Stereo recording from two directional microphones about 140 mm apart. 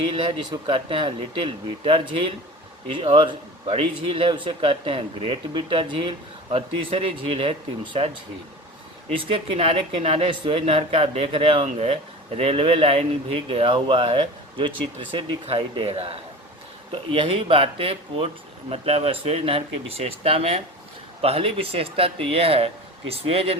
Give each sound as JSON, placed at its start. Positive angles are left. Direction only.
{"t": 0.0, "sound": "a man's voice", "side_deg": -40}
{"t": 9.1, "sound": "a man's voice", "side_deg": -40}